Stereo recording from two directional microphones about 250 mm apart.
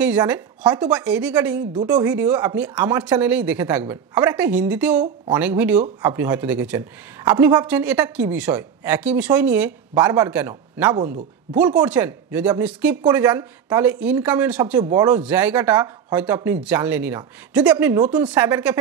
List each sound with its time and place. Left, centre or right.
0.0 s a woman's voice: centre